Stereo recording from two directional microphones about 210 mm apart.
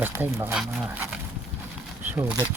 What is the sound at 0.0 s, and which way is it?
Speech, 10° right (ahead or behind).